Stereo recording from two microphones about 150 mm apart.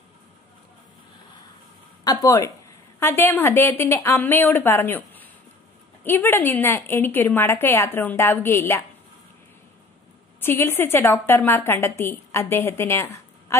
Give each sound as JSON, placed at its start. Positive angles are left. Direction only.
{"t": 2.0, "sound": "a woman's voice", "side_deg": 20}
{"t": 10.4, "sound": "a woman's voice", "side_deg": 15}